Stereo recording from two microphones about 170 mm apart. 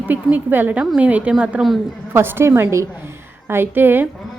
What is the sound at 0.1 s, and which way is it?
A woman's voice, 10° right (ahead or behind).